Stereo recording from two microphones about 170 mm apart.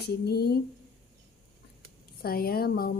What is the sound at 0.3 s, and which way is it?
Speech, 70° left (ahead or behind).